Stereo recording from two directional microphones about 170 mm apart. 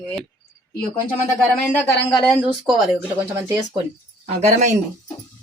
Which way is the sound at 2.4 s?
Centre (ahead or behind).